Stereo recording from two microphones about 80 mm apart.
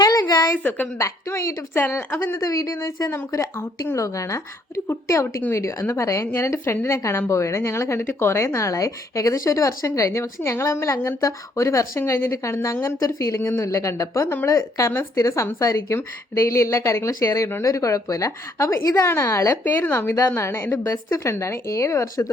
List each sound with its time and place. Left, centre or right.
0.0 s a sound: left
0.5 s a woman's voice: left
0.9 s a woman's voice: left
2.4 s speech: left
19.6 s a woman's voice: left